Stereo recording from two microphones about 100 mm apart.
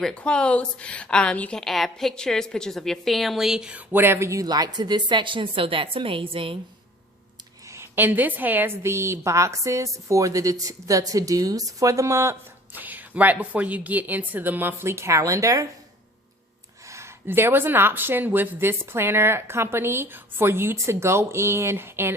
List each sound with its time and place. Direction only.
0.0 s a woman's voice: 10° left (ahead or behind); by 3.8 s 10° right (ahead or behind)
3.9 s speech: 25° right (ahead or behind); by 6.6 s 65° right (ahead or behind)
7.7 s a woman's voice: 25° right (ahead or behind)
12.7 s speech: 15° right (ahead or behind)
16.8 s speech: 30° right (ahead or behind)